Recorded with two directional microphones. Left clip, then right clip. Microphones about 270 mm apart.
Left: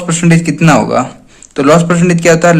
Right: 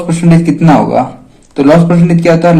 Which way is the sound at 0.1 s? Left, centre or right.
Left.